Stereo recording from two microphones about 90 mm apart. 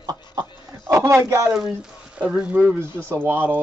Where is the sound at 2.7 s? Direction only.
25° right (ahead or behind).